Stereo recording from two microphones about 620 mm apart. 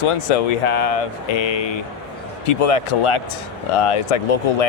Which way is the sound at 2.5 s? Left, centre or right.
Left.